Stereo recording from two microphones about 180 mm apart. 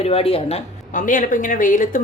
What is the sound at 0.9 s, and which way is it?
A woman's voice, 45° left (ahead or behind).